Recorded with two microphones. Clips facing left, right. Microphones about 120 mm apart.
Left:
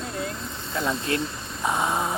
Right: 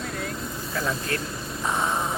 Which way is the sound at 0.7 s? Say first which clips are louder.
Left 3 dB; 25° left (ahead or behind).